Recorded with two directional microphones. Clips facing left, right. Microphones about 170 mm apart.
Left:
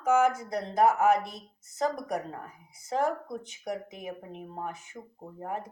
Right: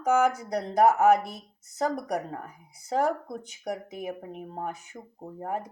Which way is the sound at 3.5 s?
40° right (ahead or behind).